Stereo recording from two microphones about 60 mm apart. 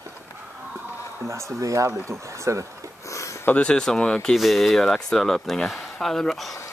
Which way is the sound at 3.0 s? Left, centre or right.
Left.